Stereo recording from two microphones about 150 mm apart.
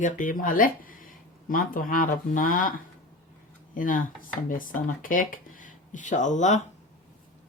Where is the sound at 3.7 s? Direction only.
65° left (ahead or behind).